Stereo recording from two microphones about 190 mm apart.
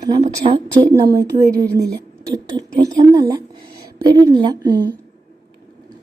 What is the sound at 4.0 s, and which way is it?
Speech, 20° right (ahead or behind).